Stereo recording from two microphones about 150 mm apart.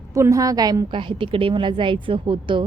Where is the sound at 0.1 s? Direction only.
20° right (ahead or behind).